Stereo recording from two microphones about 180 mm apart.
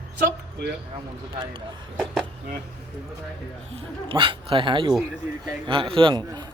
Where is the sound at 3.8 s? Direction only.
30° right (ahead or behind).